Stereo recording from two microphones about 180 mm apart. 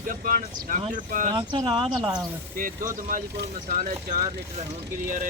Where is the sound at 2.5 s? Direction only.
50° right (ahead or behind).